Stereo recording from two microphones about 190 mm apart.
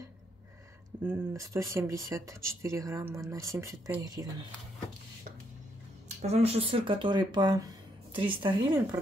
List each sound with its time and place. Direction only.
1.0 s speech: 15° right (ahead or behind)
6.0 s speech: 35° right (ahead or behind)